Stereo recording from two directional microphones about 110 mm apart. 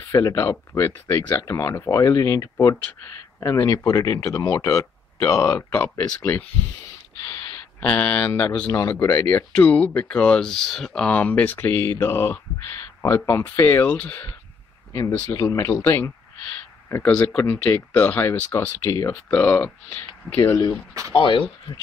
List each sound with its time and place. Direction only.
0.1 s speech: 30° left (ahead or behind)
5.6 s speech: 20° left (ahead or behind)
7.2 s a sound: 40° left (ahead or behind)
7.8 s speech: 10° left (ahead or behind)
8.3 s speech: 25° left (ahead or behind)
14.9 s speech: 30° left (ahead or behind)
17.1 s speech: 5° left (ahead or behind)
17.4 s speech: 20° left (ahead or behind)
19.3 s speech: 15° left (ahead or behind)
20.3 s speech: 30° left (ahead or behind)
21.1 s speech: 50° left (ahead or behind)